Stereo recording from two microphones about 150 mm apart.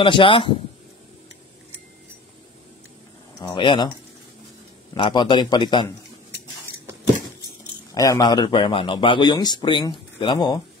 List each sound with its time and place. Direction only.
0.0 s speech: 35° left (ahead or behind)
3.3 s speech: 35° left (ahead or behind)
4.9 s speech: 30° left (ahead or behind)
7.9 s speech: 25° left (ahead or behind)